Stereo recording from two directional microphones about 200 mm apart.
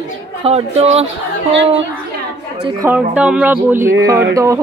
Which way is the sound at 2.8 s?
10° right (ahead or behind).